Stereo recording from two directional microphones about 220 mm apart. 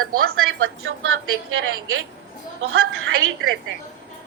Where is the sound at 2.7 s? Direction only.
70° right (ahead or behind).